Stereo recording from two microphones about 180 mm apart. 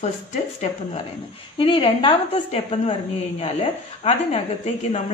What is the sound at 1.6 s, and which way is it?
A woman's voice, 30° left (ahead or behind).